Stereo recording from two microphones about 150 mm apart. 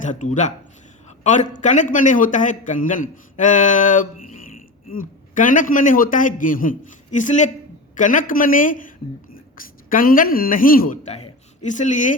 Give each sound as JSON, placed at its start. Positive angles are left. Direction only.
{"t": 0.0, "sound": "a man's voice", "side_deg": 55}